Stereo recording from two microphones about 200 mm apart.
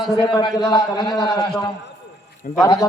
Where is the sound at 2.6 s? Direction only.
15° left (ahead or behind).